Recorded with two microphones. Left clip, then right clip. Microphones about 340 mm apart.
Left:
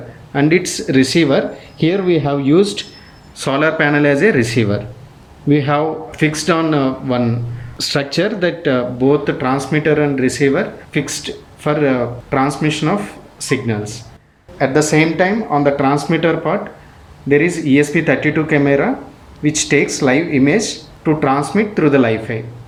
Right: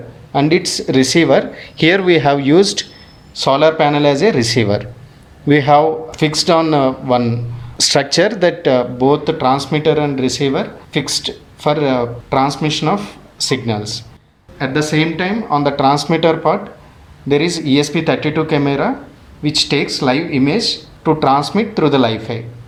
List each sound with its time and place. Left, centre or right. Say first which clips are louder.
0.3 s speech: right 1 dB; centre
14.6 s speech: left 3 dB; centre
17.9 s speech: left 1 dB; centre